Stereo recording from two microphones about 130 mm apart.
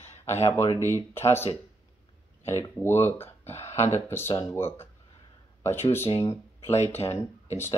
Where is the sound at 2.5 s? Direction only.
20° left (ahead or behind).